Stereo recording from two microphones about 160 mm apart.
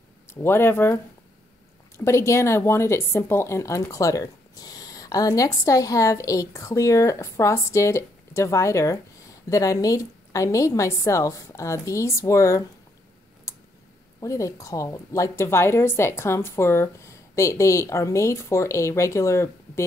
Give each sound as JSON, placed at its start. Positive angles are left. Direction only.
{"t": 0.3, "sound": "a woman's voice", "side_deg": 15}
{"t": 13.5, "sound": "clicking", "side_deg": 20}
{"t": 14.2, "sound": "a woman's voice", "side_deg": 20}